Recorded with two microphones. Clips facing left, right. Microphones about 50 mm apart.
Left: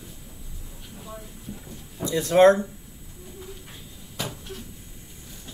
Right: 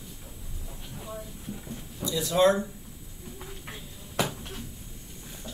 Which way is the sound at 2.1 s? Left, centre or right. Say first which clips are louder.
Left 6 dB; left.